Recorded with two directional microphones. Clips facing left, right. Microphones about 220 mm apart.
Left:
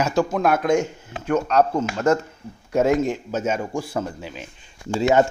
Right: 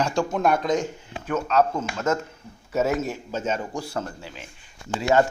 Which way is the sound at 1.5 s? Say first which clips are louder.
Even; 40° left (ahead or behind).